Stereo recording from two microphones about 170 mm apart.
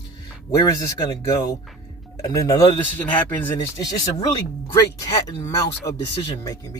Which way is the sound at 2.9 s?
10° left (ahead or behind).